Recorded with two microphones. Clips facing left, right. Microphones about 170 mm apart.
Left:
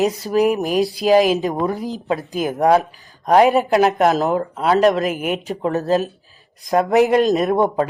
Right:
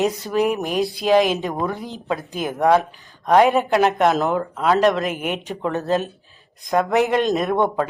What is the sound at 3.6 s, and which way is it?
Speech, 40° left (ahead or behind).